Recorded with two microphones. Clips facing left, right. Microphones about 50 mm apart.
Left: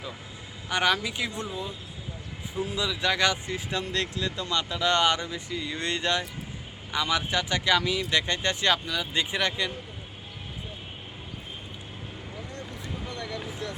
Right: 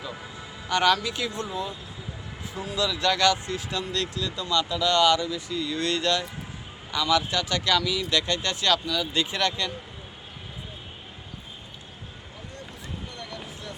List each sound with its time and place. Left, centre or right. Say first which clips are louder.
0.7 s speech: right 3 dB; centre
2.7 s speech: right 3 dB; centre